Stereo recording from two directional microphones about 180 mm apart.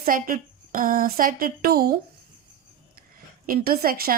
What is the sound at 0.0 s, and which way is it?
Speech, 50° right (ahead or behind).